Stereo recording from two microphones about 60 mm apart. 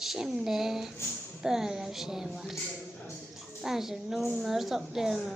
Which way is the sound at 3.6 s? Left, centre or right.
Centre.